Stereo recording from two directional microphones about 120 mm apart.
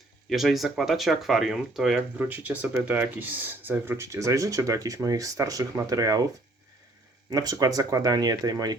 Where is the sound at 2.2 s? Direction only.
15° right (ahead or behind); by 6.3 s 30° right (ahead or behind).